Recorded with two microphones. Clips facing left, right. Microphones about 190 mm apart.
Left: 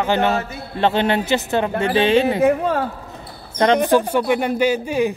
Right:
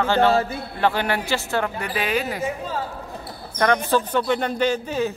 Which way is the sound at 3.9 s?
10° left (ahead or behind).